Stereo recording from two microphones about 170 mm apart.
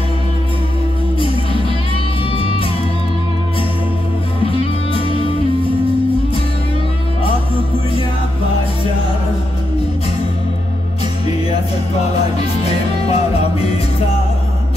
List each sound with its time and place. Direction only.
4.5 s music: 35° left (ahead or behind)
12.4 s music: 35° left (ahead or behind)